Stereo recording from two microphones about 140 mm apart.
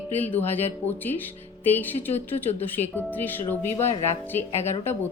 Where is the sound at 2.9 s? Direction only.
15° left (ahead or behind).